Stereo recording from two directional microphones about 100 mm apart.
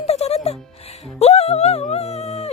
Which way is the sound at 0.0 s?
90° left.